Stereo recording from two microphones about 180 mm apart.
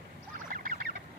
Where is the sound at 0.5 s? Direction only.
50° right (ahead or behind).